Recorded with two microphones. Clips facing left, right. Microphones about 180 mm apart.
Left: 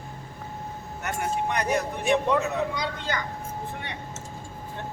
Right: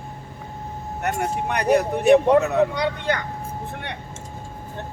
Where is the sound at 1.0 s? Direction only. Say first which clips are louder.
Right 3 dB; 65° right (ahead or behind).